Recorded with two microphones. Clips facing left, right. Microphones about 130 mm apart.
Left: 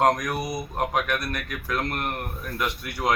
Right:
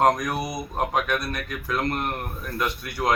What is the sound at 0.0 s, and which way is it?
Speech, 5° right (ahead or behind).